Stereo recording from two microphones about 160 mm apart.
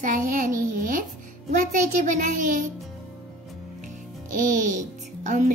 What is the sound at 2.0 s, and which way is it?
Speech, 55° right (ahead or behind).